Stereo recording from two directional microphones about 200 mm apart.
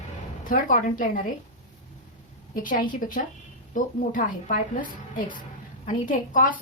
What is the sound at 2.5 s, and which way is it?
A woman's voice, 40° left (ahead or behind).